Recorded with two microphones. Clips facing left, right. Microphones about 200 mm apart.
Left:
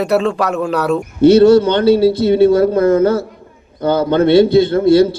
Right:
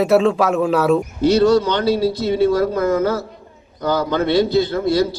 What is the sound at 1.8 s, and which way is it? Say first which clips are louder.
Speech: left 7 dB; 60° left (ahead or behind).